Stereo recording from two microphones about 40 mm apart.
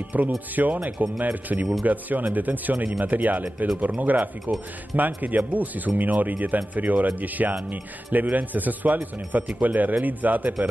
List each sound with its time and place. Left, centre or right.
0.1 s a man's voice: right